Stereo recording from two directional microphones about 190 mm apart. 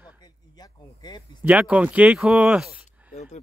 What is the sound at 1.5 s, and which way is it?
Speech, 5° right (ahead or behind).